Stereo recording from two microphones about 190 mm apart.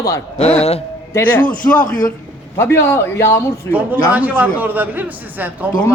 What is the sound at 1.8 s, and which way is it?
Speech, 45° left (ahead or behind).